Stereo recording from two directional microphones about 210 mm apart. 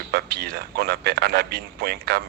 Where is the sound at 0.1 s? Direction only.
50° right (ahead or behind).